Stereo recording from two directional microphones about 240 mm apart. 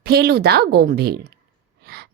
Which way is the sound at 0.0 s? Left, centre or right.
Right.